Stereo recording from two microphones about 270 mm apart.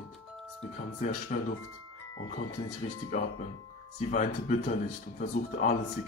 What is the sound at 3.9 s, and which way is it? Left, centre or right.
Speech, left.